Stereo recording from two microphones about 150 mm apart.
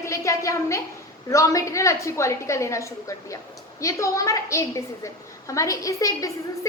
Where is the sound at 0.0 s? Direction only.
20° left (ahead or behind).